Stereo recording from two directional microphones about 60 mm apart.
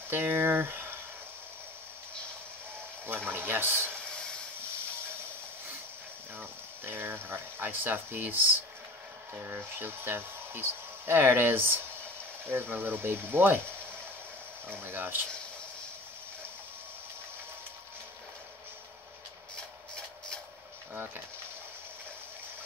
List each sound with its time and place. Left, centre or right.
0.1 s speech: right
3.1 s a sound: right
6.3 s speech: right
14.7 s speech: right
20.9 s speech: right